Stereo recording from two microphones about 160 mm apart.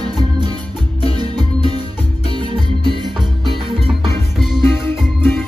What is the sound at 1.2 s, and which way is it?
Music, 30° right (ahead or behind).